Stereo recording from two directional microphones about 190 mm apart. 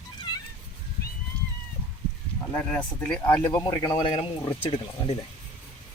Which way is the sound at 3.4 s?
20° left (ahead or behind).